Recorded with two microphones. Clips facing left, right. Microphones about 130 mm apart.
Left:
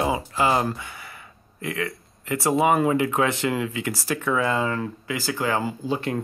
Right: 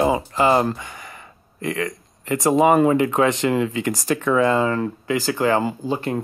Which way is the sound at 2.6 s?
40° right (ahead or behind).